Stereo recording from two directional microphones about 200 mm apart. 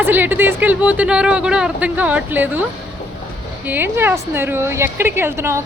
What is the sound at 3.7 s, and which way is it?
A woman's voice, 10° right (ahead or behind).